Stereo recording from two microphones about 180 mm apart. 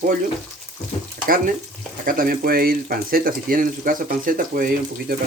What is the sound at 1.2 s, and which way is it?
Speech, 50° right (ahead or behind).